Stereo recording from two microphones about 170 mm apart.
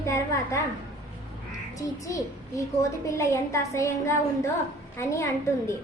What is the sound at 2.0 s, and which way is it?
A woman's voice, 20° left (ahead or behind).